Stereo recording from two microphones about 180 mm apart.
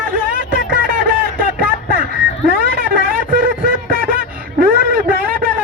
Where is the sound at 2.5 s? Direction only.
55° right (ahead or behind).